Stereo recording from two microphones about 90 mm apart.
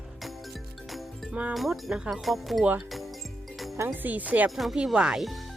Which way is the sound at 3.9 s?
20° right (ahead or behind).